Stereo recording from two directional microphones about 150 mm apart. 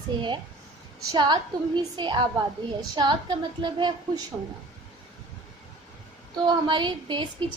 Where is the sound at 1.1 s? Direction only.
30° right (ahead or behind).